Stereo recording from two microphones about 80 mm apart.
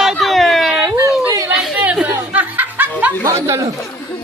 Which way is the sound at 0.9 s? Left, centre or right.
Right.